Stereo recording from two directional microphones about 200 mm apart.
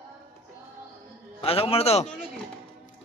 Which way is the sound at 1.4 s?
30° left (ahead or behind).